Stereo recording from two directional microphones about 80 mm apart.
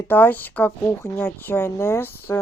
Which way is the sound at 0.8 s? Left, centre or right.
Left.